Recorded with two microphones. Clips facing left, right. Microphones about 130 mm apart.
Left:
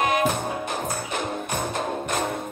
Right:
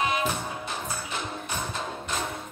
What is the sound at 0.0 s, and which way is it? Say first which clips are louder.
Music: left 5 dB; 55° left (ahead or behind).